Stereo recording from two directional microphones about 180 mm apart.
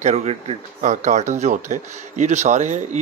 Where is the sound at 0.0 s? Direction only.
35° right (ahead or behind).